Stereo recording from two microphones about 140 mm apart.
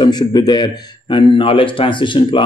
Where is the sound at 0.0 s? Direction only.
30° left (ahead or behind).